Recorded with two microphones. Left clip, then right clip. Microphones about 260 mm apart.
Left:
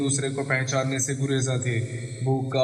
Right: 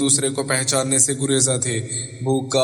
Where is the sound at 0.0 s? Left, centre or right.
Right.